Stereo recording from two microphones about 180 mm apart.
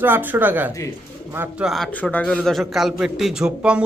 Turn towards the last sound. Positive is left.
turn(degrees=-5)  # may be behind; listen again after turning